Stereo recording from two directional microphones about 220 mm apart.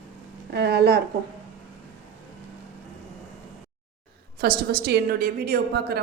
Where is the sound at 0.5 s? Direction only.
50° right (ahead or behind).